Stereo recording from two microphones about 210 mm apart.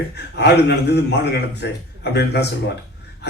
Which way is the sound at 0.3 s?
50° left (ahead or behind).